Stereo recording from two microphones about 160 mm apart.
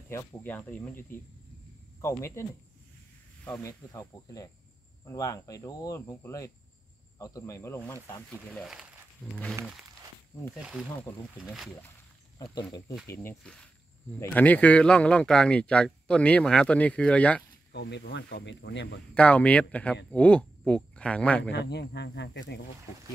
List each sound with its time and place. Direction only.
0.1 s speech: 15° left (ahead or behind)
3.4 s speech: 15° left (ahead or behind)
8.6 s speech: 5° right (ahead or behind)
10.6 s speech: 5° right (ahead or behind)
13.0 s speech: 15° left (ahead or behind)
13.4 s speech: 5° left (ahead or behind)
17.7 s speech: 90° left
19.1 s speech: 10° left (ahead or behind)
21.5 s speech: 90° left